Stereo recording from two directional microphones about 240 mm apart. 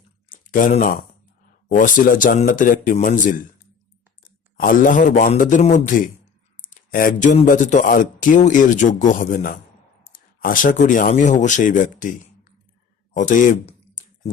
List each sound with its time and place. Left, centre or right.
0.3 s speech: left
6.6 s a sound: left
7.3 s speech: left